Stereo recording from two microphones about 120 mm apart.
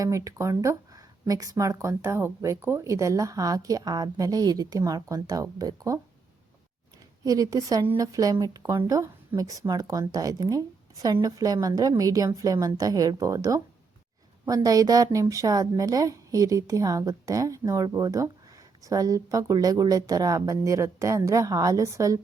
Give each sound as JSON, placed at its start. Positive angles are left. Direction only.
{"t": 0.0, "sound": "speech", "side_deg": -25}
{"t": 7.3, "sound": "a woman's voice", "side_deg": -30}